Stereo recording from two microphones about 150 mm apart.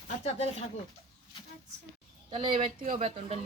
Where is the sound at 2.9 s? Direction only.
45° right (ahead or behind).